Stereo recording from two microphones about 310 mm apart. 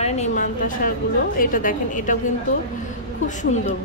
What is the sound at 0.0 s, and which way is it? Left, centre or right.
A woman's voice, left.